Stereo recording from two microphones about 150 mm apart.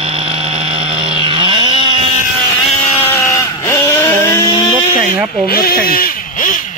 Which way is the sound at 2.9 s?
15° left (ahead or behind).